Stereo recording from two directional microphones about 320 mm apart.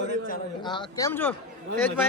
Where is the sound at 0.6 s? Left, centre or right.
Centre.